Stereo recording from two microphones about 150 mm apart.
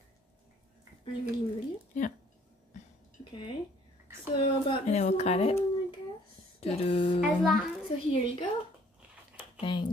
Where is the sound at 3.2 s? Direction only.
30° left (ahead or behind).